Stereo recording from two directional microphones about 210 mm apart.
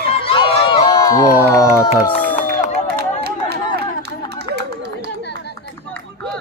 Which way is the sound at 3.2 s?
50° right (ahead or behind).